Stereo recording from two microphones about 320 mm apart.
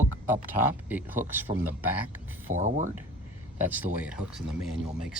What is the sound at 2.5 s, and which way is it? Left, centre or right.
Speech, right.